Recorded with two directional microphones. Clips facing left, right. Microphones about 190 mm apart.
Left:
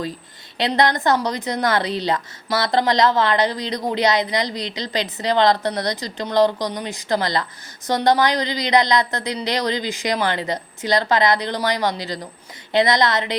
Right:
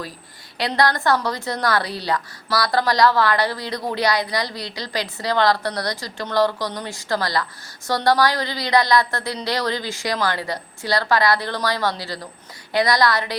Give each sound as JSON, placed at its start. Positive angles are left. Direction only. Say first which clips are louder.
{"t": 0.6, "sound": "a woman's voice", "louder": "left 2 dB", "side_deg": 20}